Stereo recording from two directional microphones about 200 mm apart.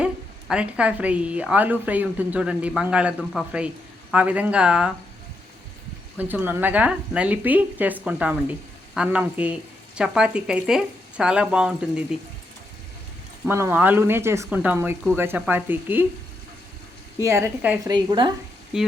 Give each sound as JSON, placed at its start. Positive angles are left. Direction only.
{"t": 0.0, "sound": "a woman's voice", "side_deg": -5}
{"t": 6.1, "sound": "a woman's voice", "side_deg": -10}
{"t": 13.4, "sound": "a woman's voice", "side_deg": -10}
{"t": 17.2, "sound": "a woman's voice", "side_deg": -15}
{"t": 17.9, "sound": "a woman's voice", "side_deg": -20}
{"t": 18.7, "sound": "a woman's voice", "side_deg": -5}